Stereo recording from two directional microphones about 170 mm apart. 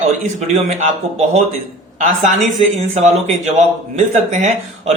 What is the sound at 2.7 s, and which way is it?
A man's voice, 45° right (ahead or behind).